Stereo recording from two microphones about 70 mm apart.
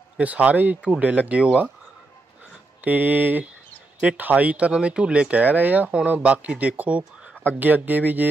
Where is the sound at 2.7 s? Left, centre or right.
Right.